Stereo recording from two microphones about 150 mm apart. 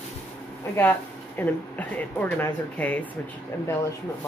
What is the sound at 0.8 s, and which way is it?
Speech, 15° left (ahead or behind).